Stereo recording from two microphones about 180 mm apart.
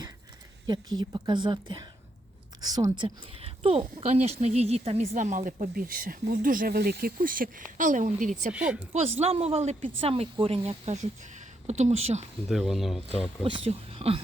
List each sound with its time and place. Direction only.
0.7 s a woman's voice: 25° right (ahead or behind); by 8.5 s 45° right (ahead or behind)
8.5 s speech: 5° right (ahead or behind)
8.9 s speech: 35° right (ahead or behind)
12.5 s speech: centre (ahead or behind)
13.7 s speech: 30° right (ahead or behind)